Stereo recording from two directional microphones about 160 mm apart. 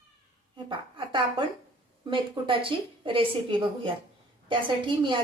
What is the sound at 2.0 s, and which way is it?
A woman's voice, 30° right (ahead or behind).